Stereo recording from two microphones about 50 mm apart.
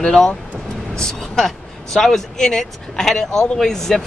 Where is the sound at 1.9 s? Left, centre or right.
Centre.